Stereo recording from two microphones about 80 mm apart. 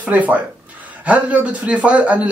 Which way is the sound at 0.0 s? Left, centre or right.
Centre.